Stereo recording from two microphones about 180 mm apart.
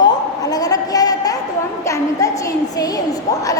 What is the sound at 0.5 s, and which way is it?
A woman's voice, 20° left (ahead or behind).